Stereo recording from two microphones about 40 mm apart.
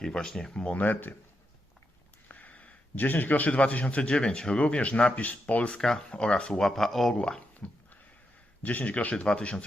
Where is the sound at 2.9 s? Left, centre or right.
Left.